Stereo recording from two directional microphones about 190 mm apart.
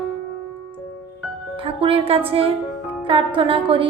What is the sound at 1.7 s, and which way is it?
A woman's voice, 30° right (ahead or behind).